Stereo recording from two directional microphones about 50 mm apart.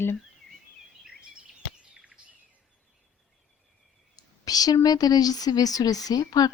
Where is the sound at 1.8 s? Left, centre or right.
Centre.